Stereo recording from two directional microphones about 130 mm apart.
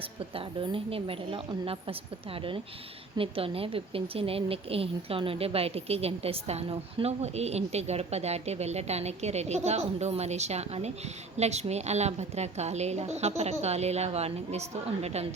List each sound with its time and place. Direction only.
0.0 s a woman's voice: 45° right (ahead or behind)